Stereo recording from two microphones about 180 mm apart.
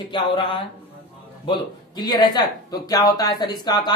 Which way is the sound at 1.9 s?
25° left (ahead or behind).